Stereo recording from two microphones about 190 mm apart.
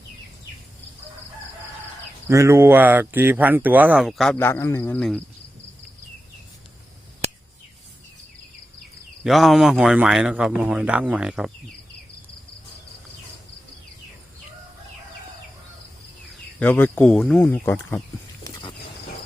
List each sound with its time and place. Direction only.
2.2 s speech: 15° right (ahead or behind); by 5.2 s 5° left (ahead or behind)
9.2 s speech: centre (ahead or behind)
16.6 s speech: 10° left (ahead or behind)